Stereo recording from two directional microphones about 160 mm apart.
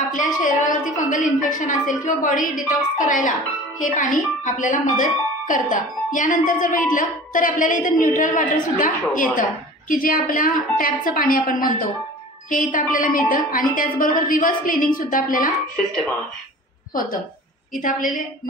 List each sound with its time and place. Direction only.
0.1 s a sound: 55° left (ahead or behind)
1.1 s a woman's voice: 55° left (ahead or behind)
17.7 s speech: 55° left (ahead or behind)